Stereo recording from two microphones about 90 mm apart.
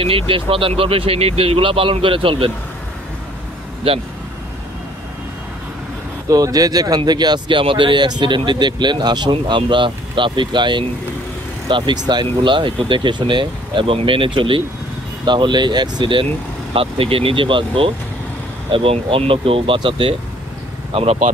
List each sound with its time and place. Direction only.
0.0 s speech: 90° right
6.2 s speech: 40° right (ahead or behind); by 14.6 s 75° right (ahead or behind)
15.2 s speech: 60° right (ahead or behind)
16.7 s speech: 90° right